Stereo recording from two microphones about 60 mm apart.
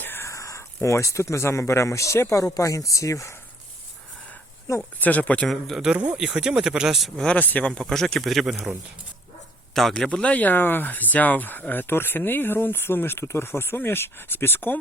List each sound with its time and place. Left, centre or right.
0.2 s speech: left
4.9 s speech: left
5.5 s speech: centre
5.8 s speech: centre
7.3 s speech: left
7.8 s speech: centre
9.7 s speech: centre
10.1 s speech: left